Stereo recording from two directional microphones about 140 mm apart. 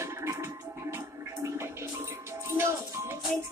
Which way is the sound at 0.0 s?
20° right (ahead or behind).